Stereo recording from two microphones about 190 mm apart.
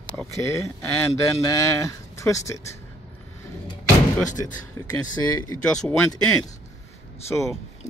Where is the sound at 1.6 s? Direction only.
15° left (ahead or behind).